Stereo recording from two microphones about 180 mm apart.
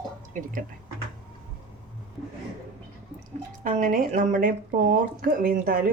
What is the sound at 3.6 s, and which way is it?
Speech, 45° right (ahead or behind).